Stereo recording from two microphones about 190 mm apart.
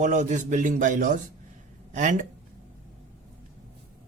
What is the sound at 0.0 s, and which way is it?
Speech, 40° right (ahead or behind).